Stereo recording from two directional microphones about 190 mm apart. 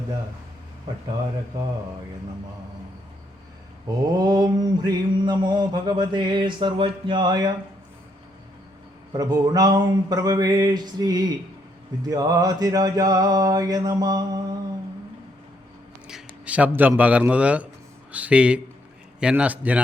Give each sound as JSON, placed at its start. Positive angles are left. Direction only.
{"t": 3.8, "sound": "mantra", "side_deg": -20}
{"t": 9.1, "sound": "mantra", "side_deg": -20}
{"t": 16.0, "sound": "a man's voice", "side_deg": -5}